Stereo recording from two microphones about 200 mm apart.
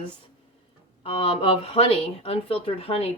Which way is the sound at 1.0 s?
30° left (ahead or behind).